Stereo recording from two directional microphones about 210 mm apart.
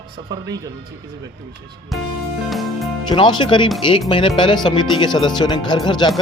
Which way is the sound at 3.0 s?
20° left (ahead or behind).